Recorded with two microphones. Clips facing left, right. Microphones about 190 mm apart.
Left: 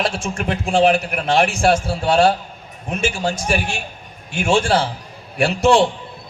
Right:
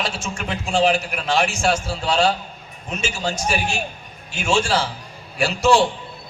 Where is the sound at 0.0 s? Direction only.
55° left (ahead or behind).